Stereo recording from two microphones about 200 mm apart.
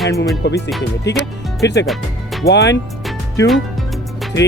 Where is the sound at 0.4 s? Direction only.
60° left (ahead or behind).